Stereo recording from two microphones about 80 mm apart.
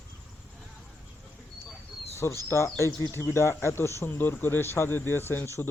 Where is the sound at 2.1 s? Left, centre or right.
Left.